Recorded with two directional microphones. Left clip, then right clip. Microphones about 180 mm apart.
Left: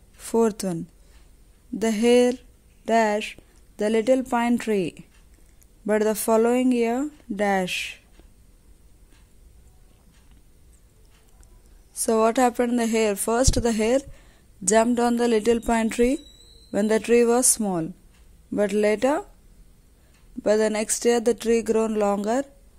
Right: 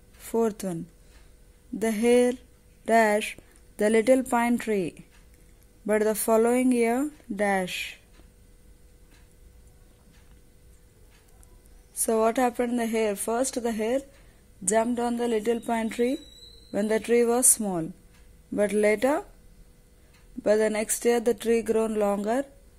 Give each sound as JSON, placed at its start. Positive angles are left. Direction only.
{"t": 0.2, "sound": "speech", "side_deg": 20}
{"t": 1.8, "sound": "speech", "side_deg": 15}
{"t": 12.0, "sound": "a woman's voice", "side_deg": 20}
{"t": 20.4, "sound": "speech", "side_deg": 15}